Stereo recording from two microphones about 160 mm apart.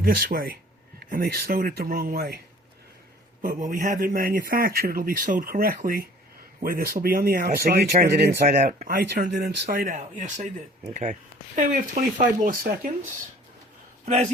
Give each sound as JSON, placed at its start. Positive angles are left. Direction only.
{"t": 0.0, "sound": "speech", "side_deg": -65}
{"t": 3.4, "sound": "speech", "side_deg": -55}
{"t": 14.0, "sound": "speech", "side_deg": -45}